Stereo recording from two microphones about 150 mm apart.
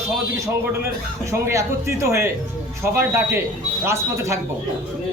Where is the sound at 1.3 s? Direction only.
20° right (ahead or behind).